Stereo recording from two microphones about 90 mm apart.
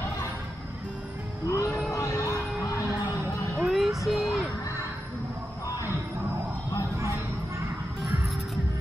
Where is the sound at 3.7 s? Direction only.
Centre (ahead or behind).